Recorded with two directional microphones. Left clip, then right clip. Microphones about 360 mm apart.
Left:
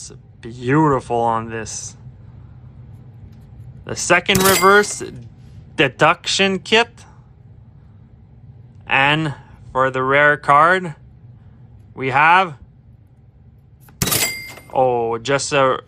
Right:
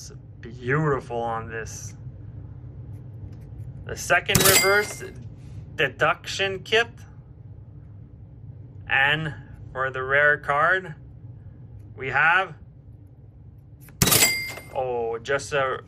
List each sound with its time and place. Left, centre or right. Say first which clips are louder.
0.0 s speech: left 6 dB; centre
3.8 s speech: left 6 dB; centre
4.4 s speech: left 4 dB; centre
5.7 s speech: left 8 dB; centre
8.9 s speech: left 5 dB; centre
11.9 s speech: left 7 dB; centre
14.0 s a sound: even; centre
14.8 s speech: left 10 dB; centre